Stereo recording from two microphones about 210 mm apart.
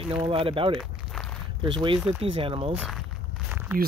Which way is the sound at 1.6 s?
25° right (ahead or behind).